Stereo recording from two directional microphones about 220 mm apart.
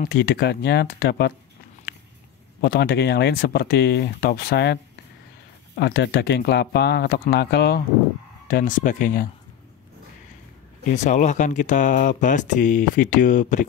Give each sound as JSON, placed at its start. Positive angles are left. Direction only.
{"t": 0.0, "sound": "speech", "side_deg": 45}
{"t": 2.6, "sound": "speech", "side_deg": 45}
{"t": 5.8, "sound": "speech", "side_deg": 50}
{"t": 11.1, "sound": "speech", "side_deg": 35}